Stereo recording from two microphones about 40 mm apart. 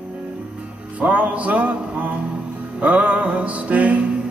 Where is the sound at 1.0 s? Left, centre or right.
Right.